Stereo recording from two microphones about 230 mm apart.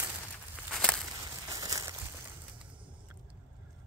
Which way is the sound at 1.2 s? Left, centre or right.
Centre.